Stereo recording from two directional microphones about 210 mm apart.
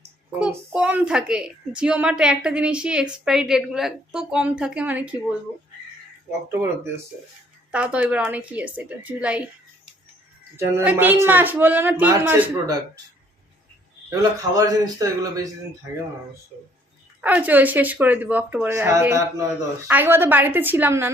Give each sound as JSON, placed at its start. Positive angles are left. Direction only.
{"t": 0.3, "sound": "a child's voice", "side_deg": -5}
{"t": 6.5, "sound": "speech", "side_deg": -10}
{"t": 10.8, "sound": "speech", "side_deg": -10}
{"t": 14.1, "sound": "speech", "side_deg": -15}
{"t": 17.2, "sound": "speech", "side_deg": -5}